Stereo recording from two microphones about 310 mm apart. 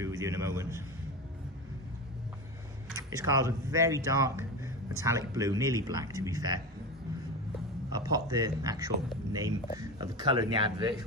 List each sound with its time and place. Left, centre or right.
0.0 s speech: centre
2.9 s speech: centre
7.9 s speech: centre